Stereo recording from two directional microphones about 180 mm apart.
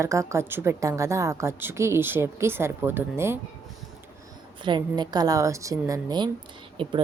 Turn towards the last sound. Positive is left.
turn(degrees=-30)  # may be behind; listen again after turning